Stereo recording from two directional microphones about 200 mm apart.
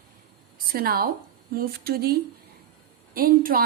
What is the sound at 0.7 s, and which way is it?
A woman's voice, 50° right (ahead or behind).